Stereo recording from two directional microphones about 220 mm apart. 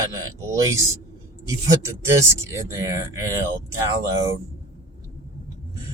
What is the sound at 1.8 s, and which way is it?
Speech, 15° right (ahead or behind).